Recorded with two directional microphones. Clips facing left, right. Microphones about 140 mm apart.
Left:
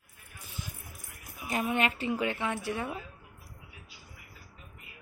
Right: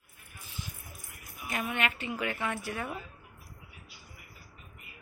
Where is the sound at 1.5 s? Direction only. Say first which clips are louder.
Left 4 dB; 30° left (ahead or behind).